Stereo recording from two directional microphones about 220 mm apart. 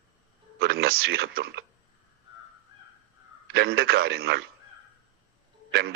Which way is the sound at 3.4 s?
50° right (ahead or behind).